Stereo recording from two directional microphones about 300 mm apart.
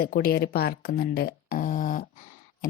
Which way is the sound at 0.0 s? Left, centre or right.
Left.